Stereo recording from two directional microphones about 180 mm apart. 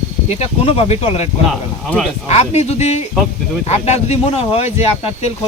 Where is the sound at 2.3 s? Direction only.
35° left (ahead or behind).